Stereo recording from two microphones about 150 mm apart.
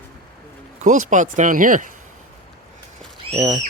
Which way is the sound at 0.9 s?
55° right (ahead or behind).